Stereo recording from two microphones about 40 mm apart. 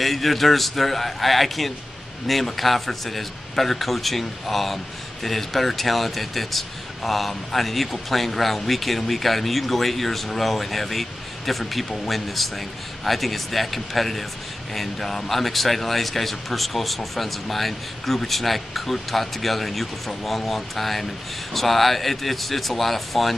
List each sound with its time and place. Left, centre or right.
0.0 s speech: centre